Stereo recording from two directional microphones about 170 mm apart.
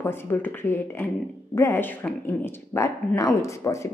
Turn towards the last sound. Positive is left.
turn(degrees=15)  # may be behind; listen again after turning